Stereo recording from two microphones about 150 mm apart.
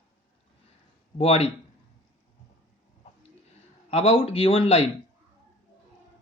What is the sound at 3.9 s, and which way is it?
Speech, 40° left (ahead or behind).